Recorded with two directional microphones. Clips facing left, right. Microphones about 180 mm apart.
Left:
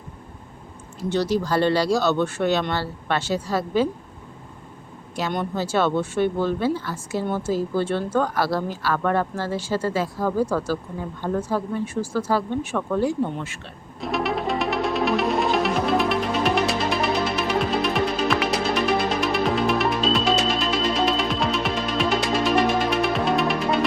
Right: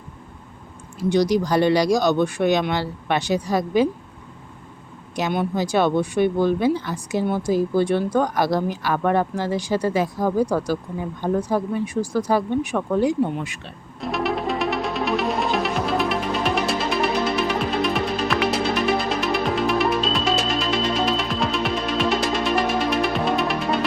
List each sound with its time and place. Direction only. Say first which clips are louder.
1.1 s speech: right 3 dB; 15° right (ahead or behind)
5.3 s speech: right 3 dB; 10° right (ahead or behind)
14.0 s music: right 1 dB; centre (ahead or behind)